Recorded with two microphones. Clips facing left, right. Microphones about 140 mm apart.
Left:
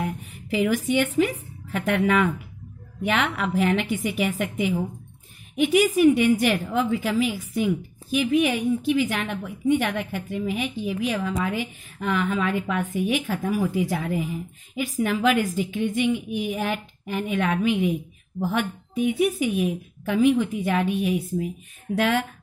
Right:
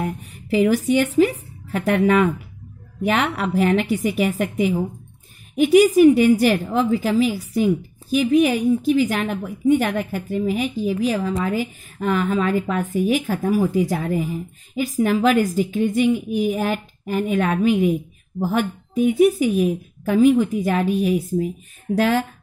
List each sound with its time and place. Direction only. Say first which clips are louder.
0.0 s a woman's voice: right 3 dB; 40° right (ahead or behind)